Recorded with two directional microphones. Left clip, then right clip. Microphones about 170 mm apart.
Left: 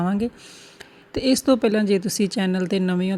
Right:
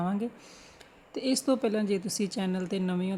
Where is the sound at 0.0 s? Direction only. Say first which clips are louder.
Left 7 dB; 30° left (ahead or behind).